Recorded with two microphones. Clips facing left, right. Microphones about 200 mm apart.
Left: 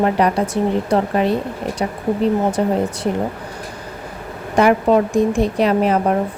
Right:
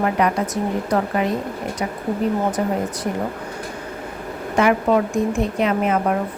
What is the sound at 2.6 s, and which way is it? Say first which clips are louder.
Speech: left 4 dB; 30° left (ahead or behind).